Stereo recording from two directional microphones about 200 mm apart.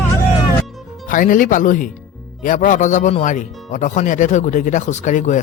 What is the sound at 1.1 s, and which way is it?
Speech, 40° left (ahead or behind).